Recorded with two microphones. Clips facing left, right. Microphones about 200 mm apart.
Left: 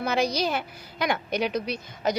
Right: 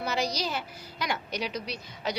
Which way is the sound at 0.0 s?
55° left (ahead or behind).